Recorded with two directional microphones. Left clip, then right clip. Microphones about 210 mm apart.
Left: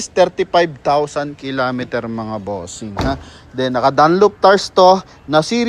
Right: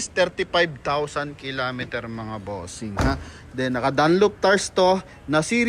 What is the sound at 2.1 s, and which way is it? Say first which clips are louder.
Speech: left 9 dB; 20° left (ahead or behind).